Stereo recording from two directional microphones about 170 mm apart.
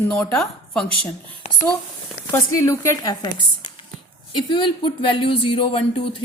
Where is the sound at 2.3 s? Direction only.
15° left (ahead or behind).